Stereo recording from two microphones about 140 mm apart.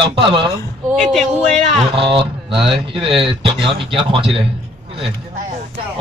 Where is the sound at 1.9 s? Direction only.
40° right (ahead or behind).